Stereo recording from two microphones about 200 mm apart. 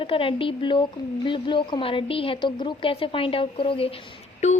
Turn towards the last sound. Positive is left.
turn(degrees=35)  # may be behind; listen again after turning